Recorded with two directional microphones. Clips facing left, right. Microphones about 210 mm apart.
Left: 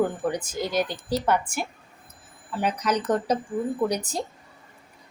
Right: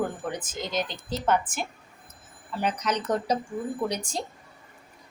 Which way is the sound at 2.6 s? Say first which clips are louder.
Left 3 dB; 10° left (ahead or behind).